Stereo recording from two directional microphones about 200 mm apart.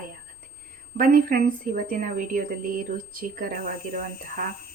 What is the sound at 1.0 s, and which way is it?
A woman's voice, 45° right (ahead or behind).